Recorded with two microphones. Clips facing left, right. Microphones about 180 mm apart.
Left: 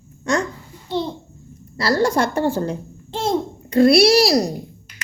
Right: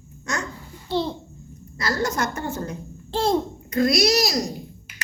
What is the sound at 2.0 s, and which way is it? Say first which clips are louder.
A woman's voice: left 8 dB; 30° left (ahead or behind).